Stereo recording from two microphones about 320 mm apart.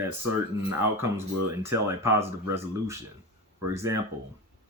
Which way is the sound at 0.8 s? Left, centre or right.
Centre.